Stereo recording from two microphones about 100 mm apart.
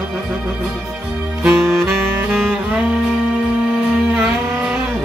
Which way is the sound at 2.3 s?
5° left (ahead or behind).